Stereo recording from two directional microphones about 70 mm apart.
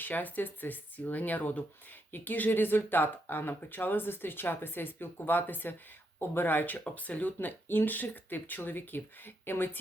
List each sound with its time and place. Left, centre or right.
0.0 s speech: left